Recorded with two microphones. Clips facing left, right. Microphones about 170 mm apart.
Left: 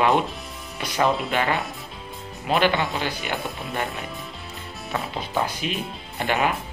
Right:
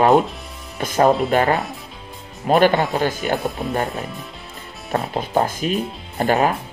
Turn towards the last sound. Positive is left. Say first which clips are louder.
# right 6 dB
turn(degrees=-40)  # may be behind; listen again after turning